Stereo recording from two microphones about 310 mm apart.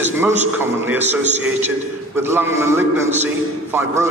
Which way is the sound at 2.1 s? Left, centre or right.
Centre.